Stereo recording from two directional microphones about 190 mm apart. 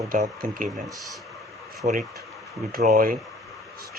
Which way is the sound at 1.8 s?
40° right (ahead or behind).